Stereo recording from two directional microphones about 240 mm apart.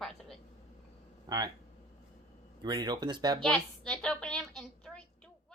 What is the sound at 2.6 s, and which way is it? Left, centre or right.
Speech, centre.